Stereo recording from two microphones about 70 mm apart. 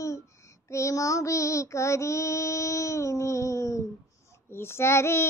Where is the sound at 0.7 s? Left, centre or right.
Left.